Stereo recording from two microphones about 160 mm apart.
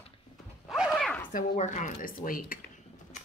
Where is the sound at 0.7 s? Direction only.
Centre (ahead or behind).